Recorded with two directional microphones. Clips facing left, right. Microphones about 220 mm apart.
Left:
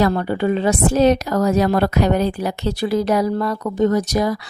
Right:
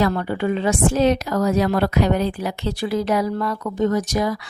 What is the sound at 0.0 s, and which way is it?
A woman's voice, 35° left (ahead or behind).